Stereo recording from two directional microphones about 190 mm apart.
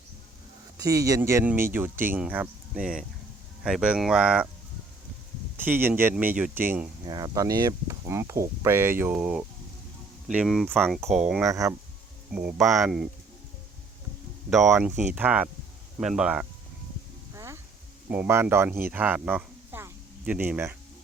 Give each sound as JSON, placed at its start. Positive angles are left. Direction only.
{"t": 0.8, "sound": "speech", "side_deg": -15}
{"t": 5.5, "sound": "speech", "side_deg": -10}
{"t": 7.0, "sound": "speech", "side_deg": -20}
{"t": 14.5, "sound": "speech", "side_deg": 0}
{"t": 17.3, "sound": "a sound", "side_deg": -15}
{"t": 18.1, "sound": "speech", "side_deg": -10}
{"t": 18.9, "sound": "a sound", "side_deg": -10}